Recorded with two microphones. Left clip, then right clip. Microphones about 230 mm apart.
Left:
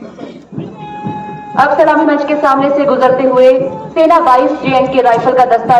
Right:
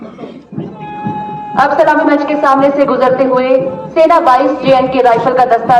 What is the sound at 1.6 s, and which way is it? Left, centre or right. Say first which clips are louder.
A woman's voice: left 1 dB; right.